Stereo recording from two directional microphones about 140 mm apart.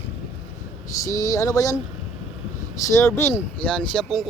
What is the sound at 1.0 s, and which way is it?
Speech, 25° left (ahead or behind).